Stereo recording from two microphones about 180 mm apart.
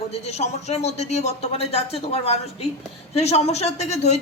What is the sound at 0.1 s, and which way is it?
A woman's voice, 35° left (ahead or behind).